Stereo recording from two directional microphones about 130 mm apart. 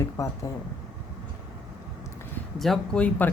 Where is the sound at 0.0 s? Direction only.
25° left (ahead or behind).